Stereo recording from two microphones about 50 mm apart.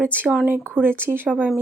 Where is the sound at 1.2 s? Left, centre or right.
Right.